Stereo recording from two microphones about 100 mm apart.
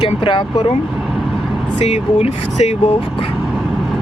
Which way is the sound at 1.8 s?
90° left.